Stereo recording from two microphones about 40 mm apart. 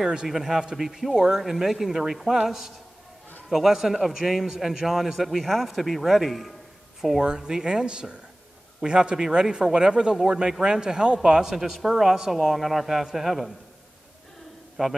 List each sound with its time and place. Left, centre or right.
0.0 s a man's voice: centre
1.1 s speech: centre
1.4 s a man's voice: centre
7.2 s a man's voice: centre
14.8 s a man's voice: centre